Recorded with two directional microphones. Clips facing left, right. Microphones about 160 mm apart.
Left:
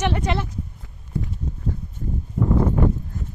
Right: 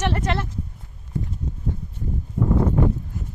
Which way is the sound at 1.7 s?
20° right (ahead or behind).